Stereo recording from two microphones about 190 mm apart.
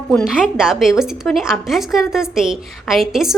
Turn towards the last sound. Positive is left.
turn(degrees=0)  # may be behind; listen again after turning